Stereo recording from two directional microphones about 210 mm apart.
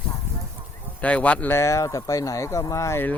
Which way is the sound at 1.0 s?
5° left (ahead or behind).